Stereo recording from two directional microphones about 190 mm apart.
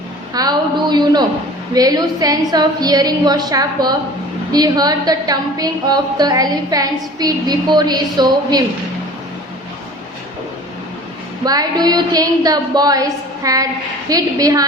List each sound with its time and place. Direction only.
0.3 s a sound: 20° right (ahead or behind)
1.7 s a woman's voice: 20° right (ahead or behind)
11.4 s a woman's voice: 20° right (ahead or behind)